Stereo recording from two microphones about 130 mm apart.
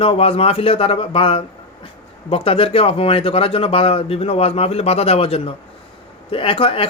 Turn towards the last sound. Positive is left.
turn(degrees=45)  # may be behind; listen again after turning